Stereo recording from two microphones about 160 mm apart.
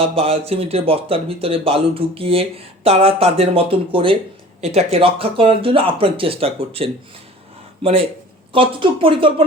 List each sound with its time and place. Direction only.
0.2 s speech: 40° right (ahead or behind)
8.5 s speech: 35° right (ahead or behind)